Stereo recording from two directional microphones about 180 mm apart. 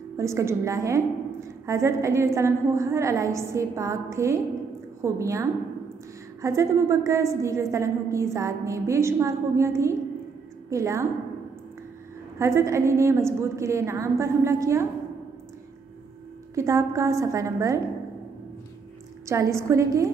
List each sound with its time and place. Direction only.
0.2 s a woman's voice: 15° right (ahead or behind)
12.4 s a woman's voice: 15° right (ahead or behind)
16.5 s a woman's voice: 15° right (ahead or behind)
19.2 s a woman's voice: 15° right (ahead or behind)